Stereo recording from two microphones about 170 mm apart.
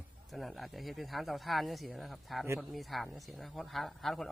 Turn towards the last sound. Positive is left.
turn(degrees=0)  # may be behind; listen again after turning